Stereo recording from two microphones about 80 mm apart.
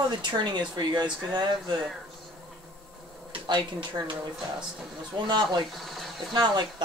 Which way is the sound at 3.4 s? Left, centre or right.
Right.